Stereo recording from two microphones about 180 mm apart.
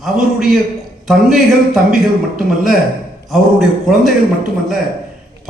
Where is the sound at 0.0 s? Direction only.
Centre (ahead or behind).